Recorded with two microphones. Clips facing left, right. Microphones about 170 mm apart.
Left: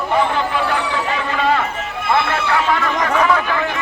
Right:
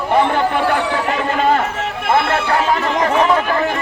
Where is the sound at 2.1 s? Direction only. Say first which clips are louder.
Right 2 dB; 40° right (ahead or behind).